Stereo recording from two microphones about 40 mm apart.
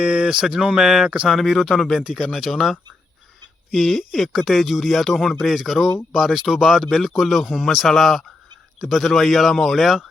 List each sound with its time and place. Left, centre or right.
0.0 s speech: right
1.4 s speech: centre
2.0 s speech: centre
2.3 s speech: centre